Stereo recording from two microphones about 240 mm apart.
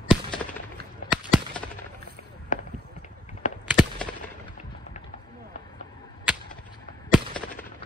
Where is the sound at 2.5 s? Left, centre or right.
Left.